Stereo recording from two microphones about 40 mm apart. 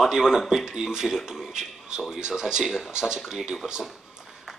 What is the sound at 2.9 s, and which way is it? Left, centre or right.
Speech, centre.